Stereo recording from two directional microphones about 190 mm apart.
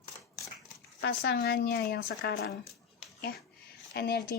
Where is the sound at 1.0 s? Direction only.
55° left (ahead or behind).